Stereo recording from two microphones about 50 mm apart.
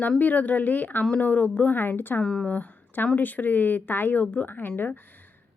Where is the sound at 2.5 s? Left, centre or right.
Left.